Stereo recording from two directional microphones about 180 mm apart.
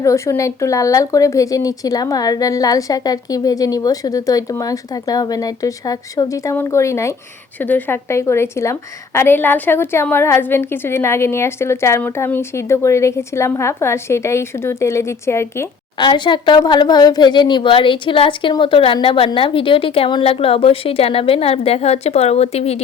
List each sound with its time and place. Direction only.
0.0 s a woman's voice: 15° left (ahead or behind)
16.0 s a woman's voice: 25° left (ahead or behind)